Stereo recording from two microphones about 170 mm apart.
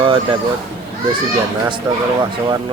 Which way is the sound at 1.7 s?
25° right (ahead or behind).